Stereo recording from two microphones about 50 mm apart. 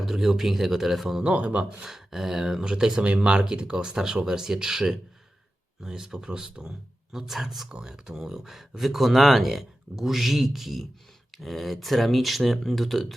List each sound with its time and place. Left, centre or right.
0.0 s speech: centre
1.2 s a man's voice: right
1.8 s a man's voice: centre
7.7 s speech: centre